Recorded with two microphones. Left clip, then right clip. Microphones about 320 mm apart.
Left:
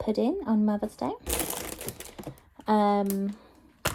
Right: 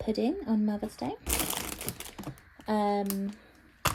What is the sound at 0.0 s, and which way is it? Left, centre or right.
A woman's voice, left.